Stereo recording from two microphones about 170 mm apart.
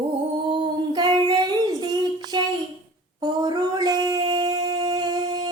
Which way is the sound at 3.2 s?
25° right (ahead or behind).